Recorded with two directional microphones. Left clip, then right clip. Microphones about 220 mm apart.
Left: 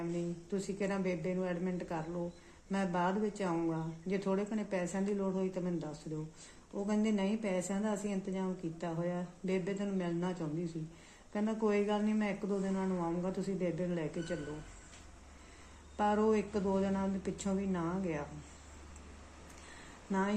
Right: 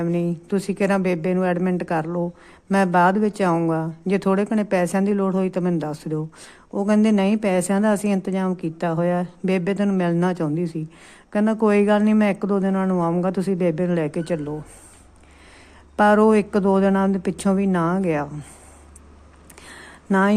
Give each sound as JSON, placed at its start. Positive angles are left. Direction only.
{"t": 0.1, "sound": "a woman's voice", "side_deg": -45}
{"t": 16.0, "sound": "a woman's voice", "side_deg": -45}
{"t": 20.1, "sound": "speech", "side_deg": -45}